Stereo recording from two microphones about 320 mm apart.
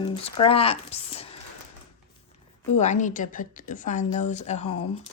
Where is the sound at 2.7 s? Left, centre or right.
Left.